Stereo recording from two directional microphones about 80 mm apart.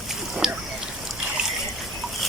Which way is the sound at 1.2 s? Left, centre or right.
Centre.